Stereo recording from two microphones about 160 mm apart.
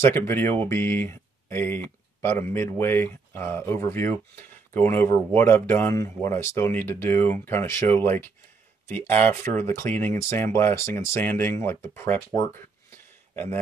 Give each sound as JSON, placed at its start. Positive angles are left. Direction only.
{"t": 0.0, "sound": "speech", "side_deg": 15}